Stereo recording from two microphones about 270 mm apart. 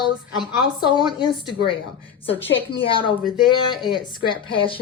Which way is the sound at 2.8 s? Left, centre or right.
Centre.